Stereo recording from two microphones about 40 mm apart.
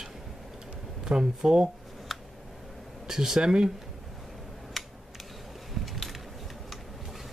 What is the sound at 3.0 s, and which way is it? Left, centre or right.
Speech, centre.